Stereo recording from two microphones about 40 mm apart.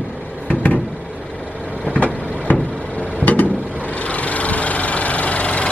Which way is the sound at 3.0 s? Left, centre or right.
Left.